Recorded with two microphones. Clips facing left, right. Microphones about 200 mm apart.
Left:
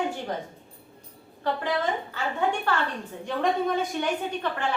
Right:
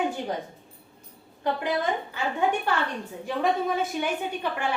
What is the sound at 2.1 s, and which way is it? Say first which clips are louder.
Speech: right 3 dB; 15° right (ahead or behind).